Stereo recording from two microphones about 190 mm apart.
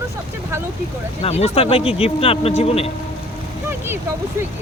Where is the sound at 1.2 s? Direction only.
35° left (ahead or behind).